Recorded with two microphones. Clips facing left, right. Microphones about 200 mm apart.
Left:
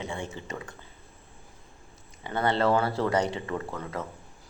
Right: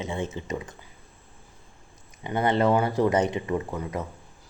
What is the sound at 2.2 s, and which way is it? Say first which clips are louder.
Speech: right 3 dB; 20° right (ahead or behind).